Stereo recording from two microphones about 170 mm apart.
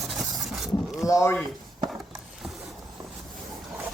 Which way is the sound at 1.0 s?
15° left (ahead or behind).